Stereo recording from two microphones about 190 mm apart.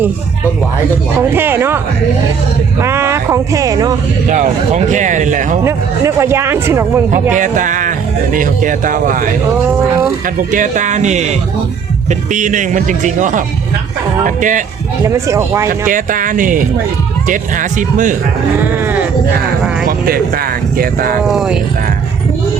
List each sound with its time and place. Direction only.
1.3 s speech: 10° right (ahead or behind)
2.8 s speech: 15° right (ahead or behind)
4.3 s speech: 40° right (ahead or behind)
5.6 s speech: 15° right (ahead or behind)
7.3 s speech: 40° right (ahead or behind)
10.5 s speech: 40° right (ahead or behind)
15.0 s speech: 15° right (ahead or behind)
15.9 s speech: 45° right (ahead or behind)
18.6 s speech: 10° right (ahead or behind)
20.1 s speech: 50° right (ahead or behind)
21.2 s speech: 5° right (ahead or behind)